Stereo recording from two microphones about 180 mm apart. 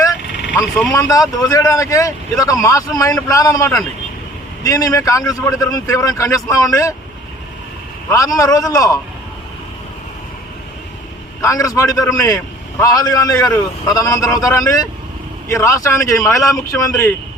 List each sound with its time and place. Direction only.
1.1 s speech: 20° left (ahead or behind)
8.1 s speech: 20° left (ahead or behind)
11.4 s a man's voice: 20° left (ahead or behind)